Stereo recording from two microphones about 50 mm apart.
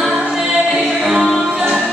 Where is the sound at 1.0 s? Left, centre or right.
Centre.